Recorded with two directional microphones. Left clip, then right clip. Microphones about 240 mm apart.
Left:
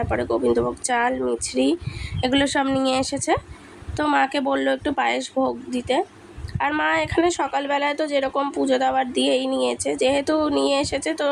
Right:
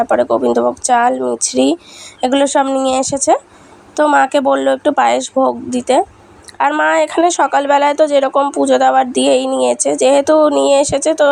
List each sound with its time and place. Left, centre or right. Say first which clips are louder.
0.0 s speech: right 10 dB; centre